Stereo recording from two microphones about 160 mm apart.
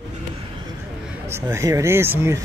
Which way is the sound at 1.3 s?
20° right (ahead or behind).